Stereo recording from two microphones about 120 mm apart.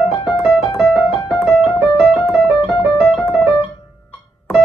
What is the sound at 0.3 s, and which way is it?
Keyboard, centre (ahead or behind).